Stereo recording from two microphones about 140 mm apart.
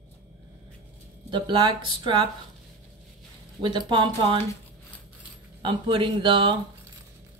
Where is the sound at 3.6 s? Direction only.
35° right (ahead or behind).